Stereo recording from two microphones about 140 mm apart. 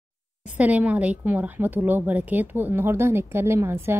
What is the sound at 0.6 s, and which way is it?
A woman's voice, 10° right (ahead or behind).